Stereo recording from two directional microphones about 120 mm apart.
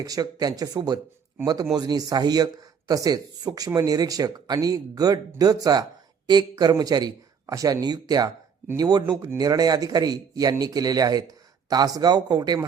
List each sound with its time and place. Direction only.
0.0 s a man's voice: 30° right (ahead or behind)